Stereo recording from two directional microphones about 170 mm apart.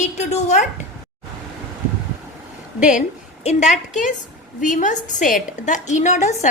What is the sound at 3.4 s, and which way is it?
A woman's voice, 45° left (ahead or behind).